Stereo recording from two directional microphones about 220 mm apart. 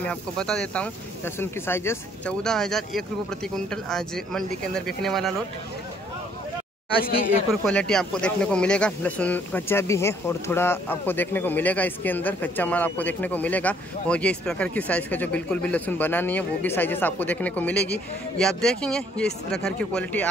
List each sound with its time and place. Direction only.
0.0 s speech: 5° left (ahead or behind)
7.2 s speech: 5° left (ahead or behind)